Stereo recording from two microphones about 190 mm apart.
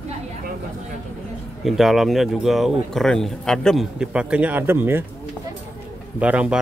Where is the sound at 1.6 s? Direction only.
Centre (ahead or behind).